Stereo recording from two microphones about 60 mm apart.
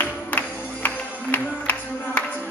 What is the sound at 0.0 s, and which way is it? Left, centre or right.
Music, left.